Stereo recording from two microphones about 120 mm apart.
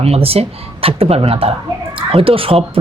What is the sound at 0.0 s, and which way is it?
Speech, 55° right (ahead or behind).